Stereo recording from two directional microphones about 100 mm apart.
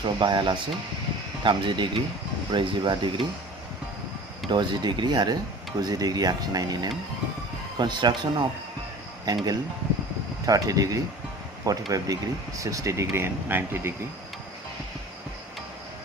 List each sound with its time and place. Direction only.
0.0 s speech: 50° right (ahead or behind)
4.4 s speech: 50° right (ahead or behind); by 13.9 s 25° right (ahead or behind)